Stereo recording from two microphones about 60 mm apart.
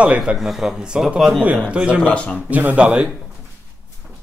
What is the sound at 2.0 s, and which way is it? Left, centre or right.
Speech, left.